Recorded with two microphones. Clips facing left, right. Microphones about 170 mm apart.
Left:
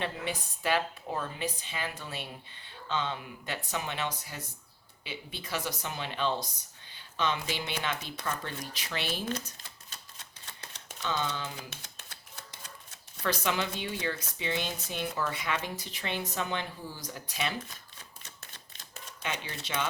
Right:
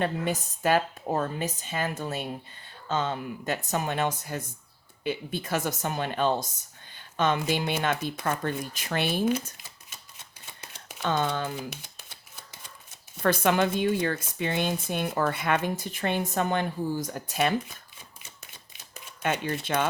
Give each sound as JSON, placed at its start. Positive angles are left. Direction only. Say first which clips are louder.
{"t": 0.0, "sound": "speech", "louder": "right 7 dB", "side_deg": -45}
{"t": 9.3, "sound": "speech", "louder": "right 7 dB", "side_deg": -5}
{"t": 11.0, "sound": "speech", "louder": "right 6 dB", "side_deg": -50}
{"t": 11.7, "sound": "shuffling cards", "louder": "right 4 dB", "side_deg": -15}
{"t": 13.2, "sound": "speech", "louder": "right 8 dB", "side_deg": -50}
{"t": 18.3, "sound": "a sound", "louder": "right 1 dB", "side_deg": -10}
{"t": 19.2, "sound": "speech", "louder": "right 9 dB", "side_deg": -50}